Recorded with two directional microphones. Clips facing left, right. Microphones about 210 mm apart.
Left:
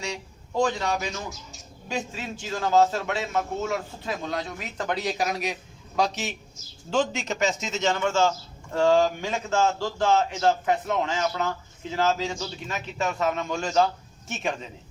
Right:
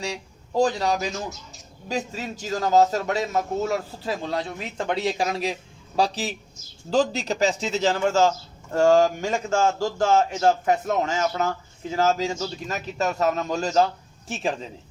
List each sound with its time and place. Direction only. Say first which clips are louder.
0.0 s a man's voice: right 2 dB; 35° right (ahead or behind)